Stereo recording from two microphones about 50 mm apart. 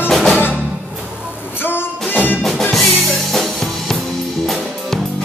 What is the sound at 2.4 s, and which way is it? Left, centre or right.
Music, centre.